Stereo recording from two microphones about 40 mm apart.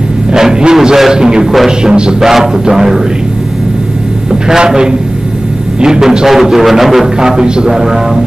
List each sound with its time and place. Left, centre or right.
0.3 s music: centre
1.8 s a man's voice: right
2.1 s music: centre
4.3 s a man's voice: centre
5.8 s music: centre
7.2 s a man's voice: centre
7.7 s music: centre